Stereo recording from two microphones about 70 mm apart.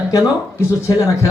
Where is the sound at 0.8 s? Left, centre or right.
Left.